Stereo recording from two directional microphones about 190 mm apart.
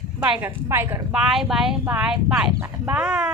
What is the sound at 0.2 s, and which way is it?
Speech, 10° right (ahead or behind).